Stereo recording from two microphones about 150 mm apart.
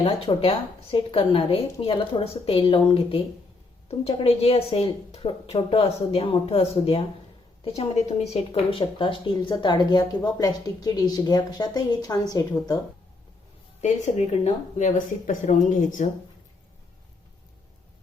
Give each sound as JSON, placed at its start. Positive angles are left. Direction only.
{"t": 0.3, "sound": "a woman's voice", "side_deg": 35}
{"t": 13.8, "sound": "speech", "side_deg": 50}